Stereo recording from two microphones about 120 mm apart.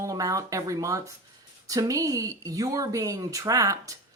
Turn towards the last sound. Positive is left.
turn(degrees=-30)  # may be behind; listen again after turning